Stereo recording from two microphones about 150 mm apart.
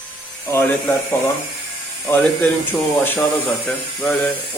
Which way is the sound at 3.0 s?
15° left (ahead or behind).